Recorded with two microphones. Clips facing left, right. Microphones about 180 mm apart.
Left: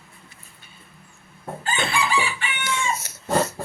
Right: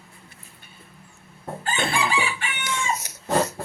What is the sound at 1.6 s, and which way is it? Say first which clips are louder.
Chicken: even; 50° right (ahead or behind).